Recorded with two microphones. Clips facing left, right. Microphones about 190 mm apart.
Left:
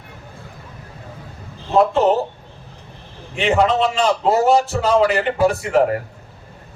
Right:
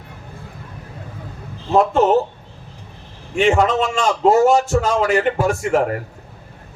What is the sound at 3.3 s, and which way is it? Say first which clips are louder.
A man's voice: right 1 dB; 45° right (ahead or behind).